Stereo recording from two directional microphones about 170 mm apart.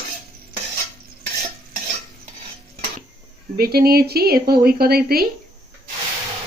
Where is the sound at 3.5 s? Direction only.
65° right (ahead or behind).